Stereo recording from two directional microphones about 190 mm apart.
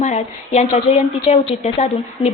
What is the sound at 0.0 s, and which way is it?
A woman's voice, 40° left (ahead or behind).